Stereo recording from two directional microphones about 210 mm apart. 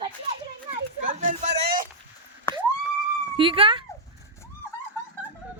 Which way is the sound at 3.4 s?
25° right (ahead or behind).